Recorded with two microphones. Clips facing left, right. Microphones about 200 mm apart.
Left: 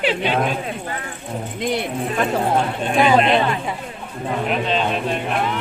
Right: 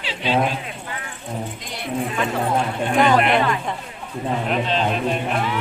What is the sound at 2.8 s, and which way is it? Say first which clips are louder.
Speech: left 1 dB; 15° left (ahead or behind).